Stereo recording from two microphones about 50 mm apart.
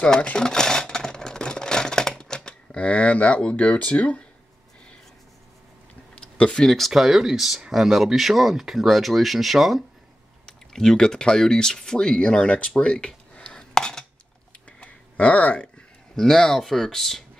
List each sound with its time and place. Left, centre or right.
0.0 s typewriter: left
6.1 s a sound: left
6.6 s speech: centre
6.9 s speech: centre
10.4 s speech: centre
14.8 s a sound: left
16.2 s speech: centre